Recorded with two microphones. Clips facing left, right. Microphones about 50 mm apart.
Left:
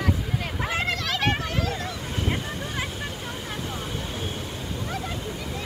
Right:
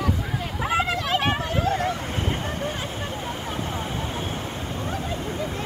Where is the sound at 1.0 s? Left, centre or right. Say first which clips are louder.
Right 2 dB; right.